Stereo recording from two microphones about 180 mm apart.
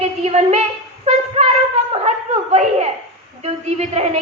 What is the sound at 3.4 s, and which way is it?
Speech, 35° right (ahead or behind).